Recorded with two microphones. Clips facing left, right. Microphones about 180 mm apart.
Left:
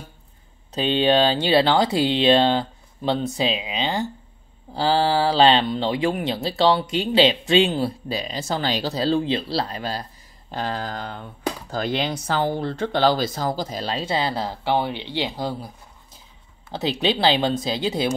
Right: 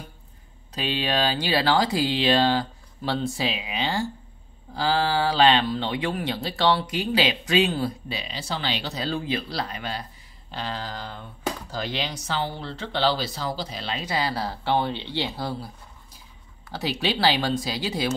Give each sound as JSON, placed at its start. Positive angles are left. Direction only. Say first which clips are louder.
{"t": 0.7, "sound": "speech", "louder": "left 7 dB", "side_deg": 30}
{"t": 4.7, "sound": "speech", "louder": "left 4 dB", "side_deg": 30}
{"t": 8.1, "sound": "speech", "louder": "left 6 dB", "side_deg": 45}
{"t": 10.5, "sound": "speech", "louder": "left 5 dB", "side_deg": 50}